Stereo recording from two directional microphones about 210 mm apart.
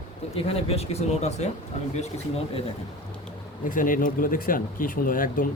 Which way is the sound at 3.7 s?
40° left (ahead or behind).